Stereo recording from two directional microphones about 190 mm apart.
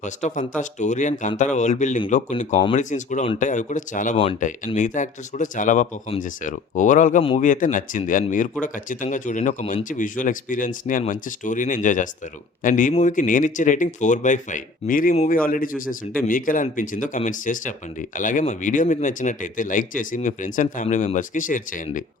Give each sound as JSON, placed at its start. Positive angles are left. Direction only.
{"t": 0.0, "sound": "speech", "side_deg": 40}
{"t": 7.2, "sound": "a man's voice", "side_deg": 30}
{"t": 7.4, "sound": "speech", "side_deg": 45}
{"t": 12.9, "sound": "speech", "side_deg": 30}
{"t": 13.1, "sound": "speech", "side_deg": 45}